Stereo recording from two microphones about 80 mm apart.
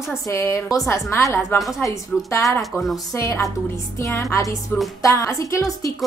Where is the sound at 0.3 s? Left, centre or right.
Left.